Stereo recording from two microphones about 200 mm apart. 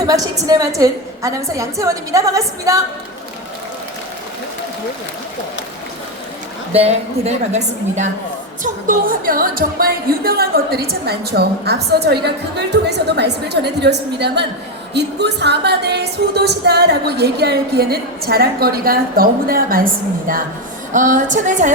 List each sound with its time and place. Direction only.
0.0 s a woman's voice: 20° right (ahead or behind)
6.7 s a woman's voice: 30° right (ahead or behind)